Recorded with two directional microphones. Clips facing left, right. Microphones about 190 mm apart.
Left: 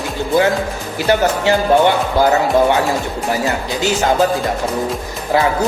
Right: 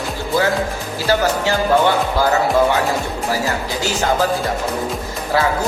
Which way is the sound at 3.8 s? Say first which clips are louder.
Left 4 dB; 20° left (ahead or behind).